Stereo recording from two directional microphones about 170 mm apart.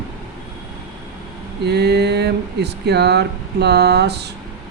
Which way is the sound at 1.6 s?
75° right (ahead or behind).